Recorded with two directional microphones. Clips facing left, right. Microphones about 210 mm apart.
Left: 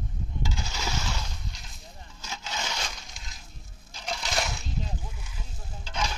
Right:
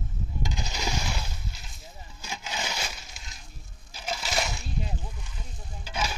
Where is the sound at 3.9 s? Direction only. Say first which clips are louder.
Right 1 dB; 5° right (ahead or behind).